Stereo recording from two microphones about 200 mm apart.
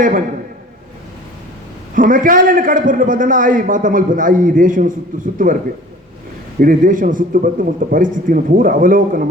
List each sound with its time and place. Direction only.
2.0 s a man's voice: 40° right (ahead or behind)
6.6 s a man's voice: 40° right (ahead or behind)